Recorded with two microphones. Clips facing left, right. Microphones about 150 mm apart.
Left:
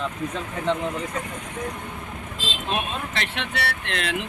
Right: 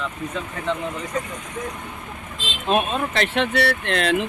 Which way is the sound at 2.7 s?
40° right (ahead or behind).